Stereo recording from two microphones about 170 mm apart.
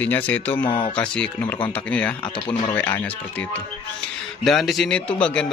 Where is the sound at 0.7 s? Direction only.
30° left (ahead or behind).